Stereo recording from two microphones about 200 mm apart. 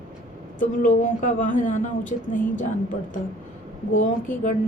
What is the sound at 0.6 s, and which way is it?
A woman's voice, 40° left (ahead or behind).